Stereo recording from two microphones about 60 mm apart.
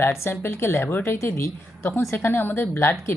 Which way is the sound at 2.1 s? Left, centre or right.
Left.